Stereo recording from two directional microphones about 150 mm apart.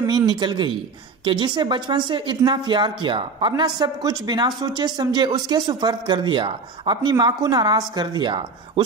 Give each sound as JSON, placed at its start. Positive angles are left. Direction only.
{"t": 0.0, "sound": "a man's voice", "side_deg": -30}